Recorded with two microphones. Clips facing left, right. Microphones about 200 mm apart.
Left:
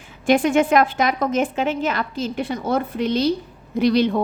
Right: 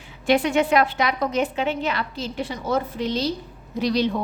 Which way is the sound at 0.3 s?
50° left (ahead or behind).